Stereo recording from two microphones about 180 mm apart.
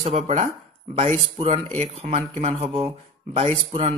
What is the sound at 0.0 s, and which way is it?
Speech, 35° right (ahead or behind).